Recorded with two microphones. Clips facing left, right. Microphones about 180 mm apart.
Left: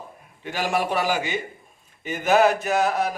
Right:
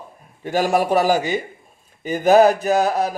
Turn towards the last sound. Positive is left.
turn(degrees=-35)  # may be behind; listen again after turning